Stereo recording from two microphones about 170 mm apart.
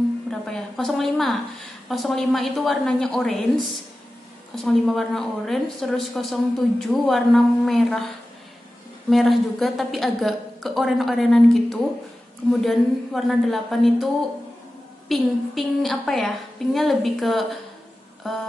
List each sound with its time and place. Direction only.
0.3 s a woman's voice: centre (ahead or behind)
4.6 s a woman's voice: centre (ahead or behind)
9.1 s a woman's voice: centre (ahead or behind)